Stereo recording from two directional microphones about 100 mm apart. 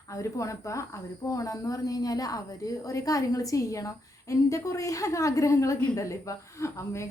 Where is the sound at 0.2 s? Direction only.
30° left (ahead or behind).